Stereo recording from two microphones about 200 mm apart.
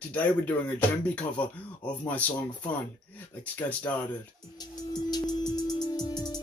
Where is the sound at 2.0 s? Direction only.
10° left (ahead or behind).